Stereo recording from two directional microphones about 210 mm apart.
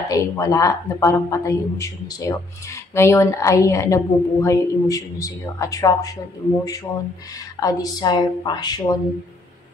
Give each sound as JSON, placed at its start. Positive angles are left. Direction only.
{"t": 0.1, "sound": "a woman's voice", "side_deg": 15}
{"t": 7.6, "sound": "speech", "side_deg": 20}